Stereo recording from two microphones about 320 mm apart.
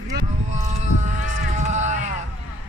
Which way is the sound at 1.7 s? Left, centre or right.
Right.